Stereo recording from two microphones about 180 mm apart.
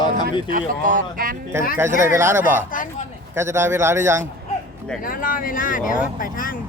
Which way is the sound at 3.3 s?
15° right (ahead or behind).